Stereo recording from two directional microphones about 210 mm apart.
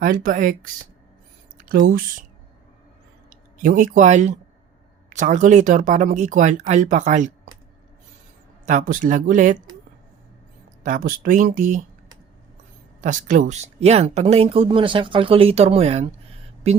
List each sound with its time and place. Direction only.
0.0 s speech: 40° right (ahead or behind)
1.5 s a sound: 40° right (ahead or behind)
3.2 s speech: 40° right (ahead or behind)
8.6 s speech: 40° right (ahead or behind)
10.8 s speech: 40° right (ahead or behind)
13.0 s speech: 40° right (ahead or behind)